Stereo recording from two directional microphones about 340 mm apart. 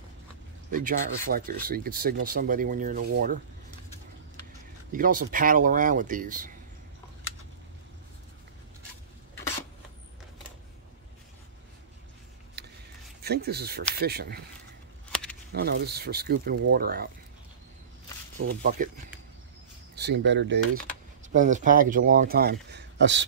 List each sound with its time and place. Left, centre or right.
0.7 s speech: right
4.9 s speech: right
12.6 s a sound: right
13.2 s speech: right
15.5 s speech: right
18.4 s speech: right
20.0 s speech: right
21.3 s speech: right